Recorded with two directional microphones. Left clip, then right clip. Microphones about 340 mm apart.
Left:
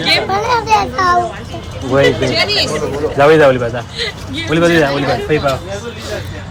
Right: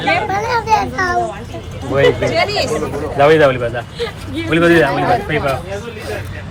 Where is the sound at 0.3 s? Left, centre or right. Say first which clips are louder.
Left 2 dB; left.